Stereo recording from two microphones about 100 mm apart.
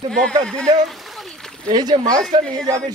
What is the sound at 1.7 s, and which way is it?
Speech, 45° right (ahead or behind).